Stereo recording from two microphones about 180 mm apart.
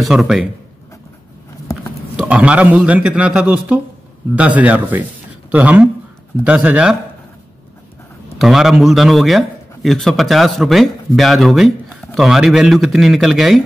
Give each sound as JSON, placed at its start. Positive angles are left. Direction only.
{"t": 0.0, "sound": "a man's voice", "side_deg": 0}
{"t": 2.1, "sound": "a man's voice", "side_deg": -5}
{"t": 8.4, "sound": "a man's voice", "side_deg": 0}